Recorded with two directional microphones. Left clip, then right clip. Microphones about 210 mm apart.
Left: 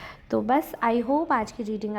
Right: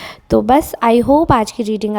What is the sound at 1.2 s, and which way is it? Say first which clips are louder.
Speech: right 12 dB; 45° right (ahead or behind).